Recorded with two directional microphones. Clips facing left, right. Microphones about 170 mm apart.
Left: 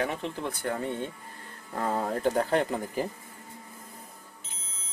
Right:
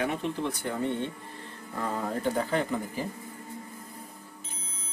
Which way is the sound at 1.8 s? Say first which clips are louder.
Left 3 dB; 40° left (ahead or behind).